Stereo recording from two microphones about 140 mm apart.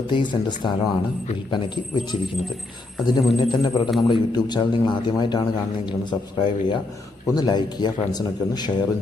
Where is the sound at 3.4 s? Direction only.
35° left (ahead or behind).